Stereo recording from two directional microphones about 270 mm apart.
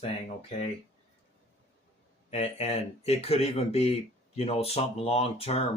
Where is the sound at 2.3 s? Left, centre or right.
Left.